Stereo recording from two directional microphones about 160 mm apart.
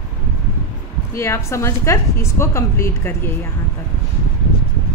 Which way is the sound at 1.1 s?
15° left (ahead or behind).